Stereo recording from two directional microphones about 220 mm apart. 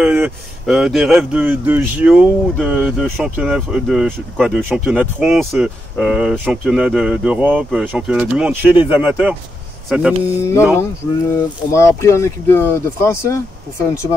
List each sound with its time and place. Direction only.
0.0 s speech: 5° right (ahead or behind)
8.7 s speech: 25° left (ahead or behind)
9.0 s speech: 5° right (ahead or behind)
10.4 s speech: 10° left (ahead or behind)
11.7 s speech: 15° left (ahead or behind)